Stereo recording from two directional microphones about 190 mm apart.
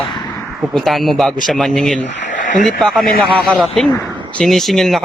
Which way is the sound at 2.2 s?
45° left (ahead or behind).